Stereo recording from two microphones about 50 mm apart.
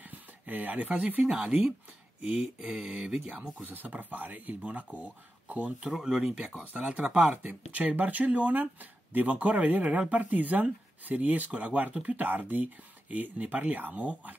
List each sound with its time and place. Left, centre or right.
0.0 s speech: right
5.9 s speech: centre
6.4 s speech: right